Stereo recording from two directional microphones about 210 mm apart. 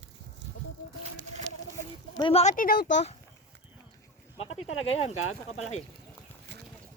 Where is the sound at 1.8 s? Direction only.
25° left (ahead or behind); by 3.0 s 45° left (ahead or behind).